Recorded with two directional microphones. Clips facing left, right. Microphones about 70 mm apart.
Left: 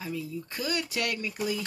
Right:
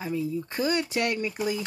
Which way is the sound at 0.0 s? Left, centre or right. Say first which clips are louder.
Right 6 dB; right.